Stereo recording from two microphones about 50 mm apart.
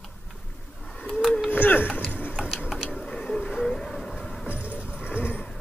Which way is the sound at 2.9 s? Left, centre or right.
Centre.